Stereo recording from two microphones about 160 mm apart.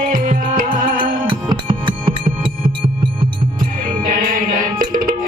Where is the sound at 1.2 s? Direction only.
30° right (ahead or behind).